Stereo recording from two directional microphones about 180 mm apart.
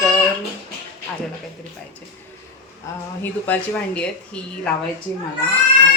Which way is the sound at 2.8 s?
15° left (ahead or behind).